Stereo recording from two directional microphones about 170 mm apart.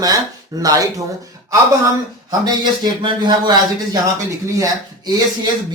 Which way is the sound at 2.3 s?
25° right (ahead or behind).